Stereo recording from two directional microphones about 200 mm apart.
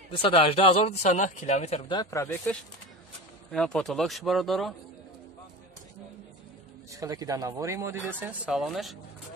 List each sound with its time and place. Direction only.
0.1 s speech: 25° left (ahead or behind); by 4.7 s centre (ahead or behind)
6.9 s speech: 15° right (ahead or behind); by 8.9 s centre (ahead or behind)